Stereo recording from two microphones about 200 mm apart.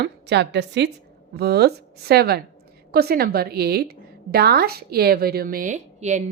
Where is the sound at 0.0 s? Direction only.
60° right (ahead or behind).